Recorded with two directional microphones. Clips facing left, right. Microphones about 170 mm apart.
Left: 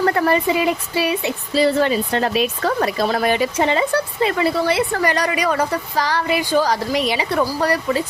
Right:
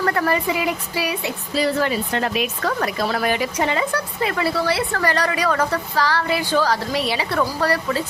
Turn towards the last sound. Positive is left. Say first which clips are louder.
# left 2 dB
turn(degrees=15)  # may be behind; listen again after turning